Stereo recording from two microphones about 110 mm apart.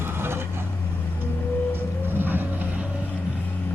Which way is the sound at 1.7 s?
20° right (ahead or behind).